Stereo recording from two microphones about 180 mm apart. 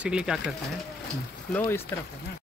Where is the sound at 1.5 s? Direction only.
15° left (ahead or behind).